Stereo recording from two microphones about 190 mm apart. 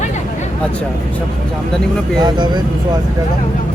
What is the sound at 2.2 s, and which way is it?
Speech, 20° right (ahead or behind).